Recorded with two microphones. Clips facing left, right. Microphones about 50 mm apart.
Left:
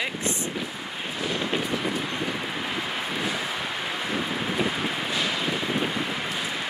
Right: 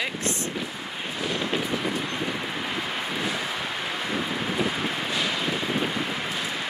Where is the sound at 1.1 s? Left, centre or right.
Centre.